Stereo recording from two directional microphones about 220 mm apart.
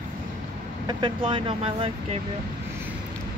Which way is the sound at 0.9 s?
20° right (ahead or behind).